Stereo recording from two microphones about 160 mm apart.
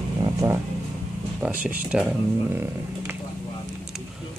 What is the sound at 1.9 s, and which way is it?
Speech, 5° right (ahead or behind).